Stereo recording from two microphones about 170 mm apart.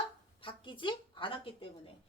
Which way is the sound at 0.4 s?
30° left (ahead or behind).